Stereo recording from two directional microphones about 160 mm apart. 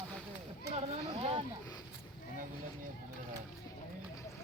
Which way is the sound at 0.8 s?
35° right (ahead or behind).